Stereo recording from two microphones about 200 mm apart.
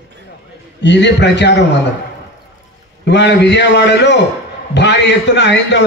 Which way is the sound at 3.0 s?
60° left (ahead or behind).